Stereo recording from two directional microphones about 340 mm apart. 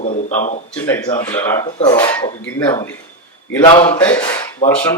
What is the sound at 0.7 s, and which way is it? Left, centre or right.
Speech, centre.